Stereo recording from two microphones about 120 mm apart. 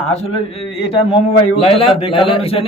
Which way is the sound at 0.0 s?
50° left (ahead or behind).